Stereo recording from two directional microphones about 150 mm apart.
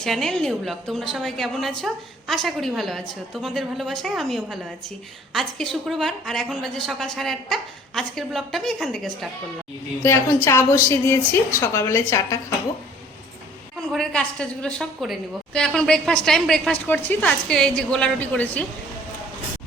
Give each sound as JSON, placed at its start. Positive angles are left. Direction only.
{"t": 0.0, "sound": "a woman's voice", "side_deg": 0}
{"t": 10.0, "sound": "a woman's voice", "side_deg": 20}
{"t": 13.9, "sound": "a woman's voice", "side_deg": 5}